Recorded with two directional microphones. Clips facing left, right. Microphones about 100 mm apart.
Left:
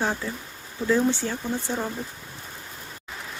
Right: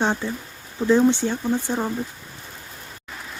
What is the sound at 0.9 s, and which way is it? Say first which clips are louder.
Speech: right 5 dB; 20° right (ahead or behind).